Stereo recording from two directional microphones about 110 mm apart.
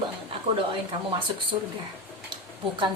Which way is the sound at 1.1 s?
50° right (ahead or behind).